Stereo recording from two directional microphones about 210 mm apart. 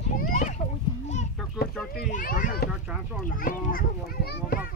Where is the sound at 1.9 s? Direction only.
40° left (ahead or behind).